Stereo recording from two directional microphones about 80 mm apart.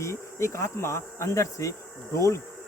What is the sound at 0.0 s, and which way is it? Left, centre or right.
Speech, left.